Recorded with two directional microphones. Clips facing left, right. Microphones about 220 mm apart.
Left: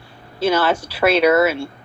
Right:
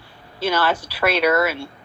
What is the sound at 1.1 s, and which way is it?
Speech, 25° left (ahead or behind).